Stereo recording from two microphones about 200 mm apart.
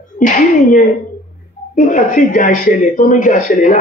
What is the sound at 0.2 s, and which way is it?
Speech, 40° left (ahead or behind).